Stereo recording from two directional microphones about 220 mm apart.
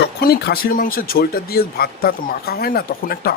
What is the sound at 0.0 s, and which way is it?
Speech, 45° left (ahead or behind).